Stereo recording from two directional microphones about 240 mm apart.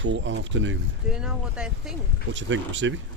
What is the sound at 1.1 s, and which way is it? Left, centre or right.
Speech, centre.